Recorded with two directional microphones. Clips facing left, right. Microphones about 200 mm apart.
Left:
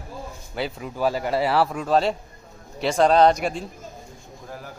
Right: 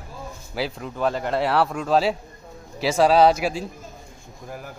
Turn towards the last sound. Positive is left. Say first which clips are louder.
# even
turn(degrees=-5)  # may be behind; listen again after turning